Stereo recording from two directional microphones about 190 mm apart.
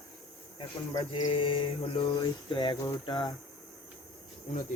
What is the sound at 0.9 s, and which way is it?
Mantra, 25° left (ahead or behind).